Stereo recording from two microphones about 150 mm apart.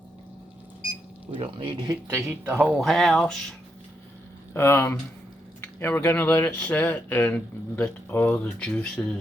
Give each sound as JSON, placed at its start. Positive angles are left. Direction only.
{"t": 1.4, "sound": "speech", "side_deg": -35}
{"t": 2.3, "sound": "a man's voice", "side_deg": -15}
{"t": 2.7, "sound": "speech", "side_deg": 0}
{"t": 4.5, "sound": "speech", "side_deg": 15}